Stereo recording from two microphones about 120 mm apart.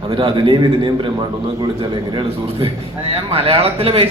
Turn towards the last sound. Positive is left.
turn(degrees=-55)  # may be behind; listen again after turning